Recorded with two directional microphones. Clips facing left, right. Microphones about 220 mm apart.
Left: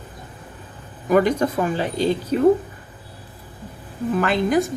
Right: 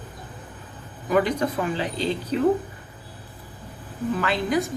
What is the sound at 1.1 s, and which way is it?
Speech, 45° left (ahead or behind).